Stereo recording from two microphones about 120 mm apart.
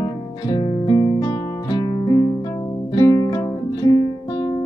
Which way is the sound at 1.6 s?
35° left (ahead or behind).